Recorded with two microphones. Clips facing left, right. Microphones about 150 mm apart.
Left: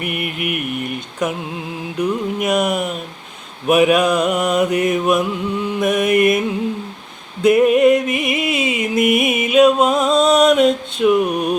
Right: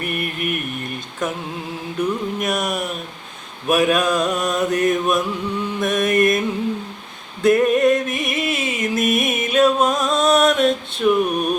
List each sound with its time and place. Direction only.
0.0 s mantra: 10° left (ahead or behind)
7.4 s music: 15° left (ahead or behind)
11.0 s mantra: 15° left (ahead or behind)